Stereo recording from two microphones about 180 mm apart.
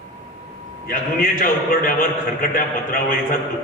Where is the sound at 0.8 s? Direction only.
50° left (ahead or behind).